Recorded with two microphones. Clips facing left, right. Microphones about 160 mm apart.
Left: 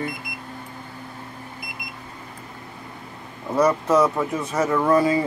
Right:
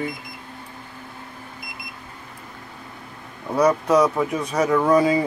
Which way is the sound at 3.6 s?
10° right (ahead or behind).